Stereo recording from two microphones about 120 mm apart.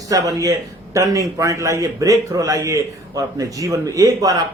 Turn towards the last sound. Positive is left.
turn(degrees=-30)  # may be behind; listen again after turning